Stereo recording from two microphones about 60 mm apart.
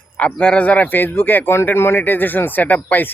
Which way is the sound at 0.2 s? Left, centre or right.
Left.